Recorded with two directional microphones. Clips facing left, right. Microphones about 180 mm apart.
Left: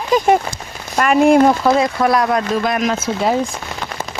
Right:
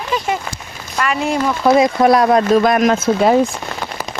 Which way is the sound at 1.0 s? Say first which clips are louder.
Left 7 dB; 50° left (ahead or behind).